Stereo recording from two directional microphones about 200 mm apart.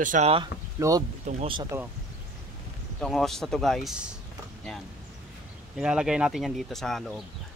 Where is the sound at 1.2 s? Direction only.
30° right (ahead or behind).